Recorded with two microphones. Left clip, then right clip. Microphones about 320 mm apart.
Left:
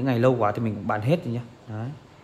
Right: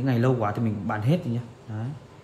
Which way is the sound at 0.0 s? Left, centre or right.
Left.